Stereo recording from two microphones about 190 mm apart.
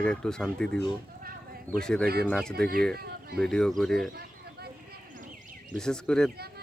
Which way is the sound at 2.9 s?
55° right (ahead or behind).